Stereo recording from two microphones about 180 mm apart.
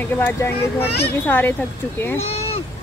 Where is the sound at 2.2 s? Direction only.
35° left (ahead or behind).